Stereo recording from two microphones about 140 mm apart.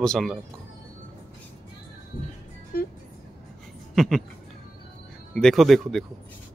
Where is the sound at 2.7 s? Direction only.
90° left.